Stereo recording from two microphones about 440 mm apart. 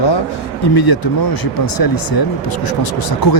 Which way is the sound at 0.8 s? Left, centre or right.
Left.